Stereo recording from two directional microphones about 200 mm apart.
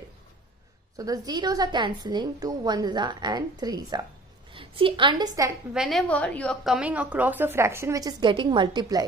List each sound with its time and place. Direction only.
0.9 s a woman's voice: 20° right (ahead or behind)
5.7 s a woman's voice: centre (ahead or behind); by 9.0 s 20° right (ahead or behind)